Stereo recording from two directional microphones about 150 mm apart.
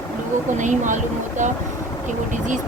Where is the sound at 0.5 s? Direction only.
55° right (ahead or behind).